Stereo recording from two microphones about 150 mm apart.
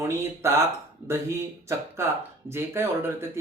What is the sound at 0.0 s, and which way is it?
A man's voice, 15° right (ahead or behind).